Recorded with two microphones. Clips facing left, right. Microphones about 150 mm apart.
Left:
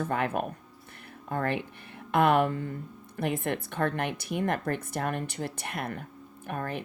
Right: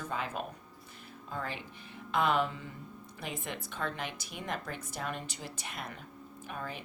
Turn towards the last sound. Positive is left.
turn(degrees=55)  # may be behind; listen again after turning